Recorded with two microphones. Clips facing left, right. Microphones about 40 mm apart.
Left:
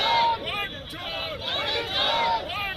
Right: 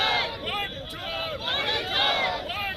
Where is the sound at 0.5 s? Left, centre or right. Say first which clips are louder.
Even; left.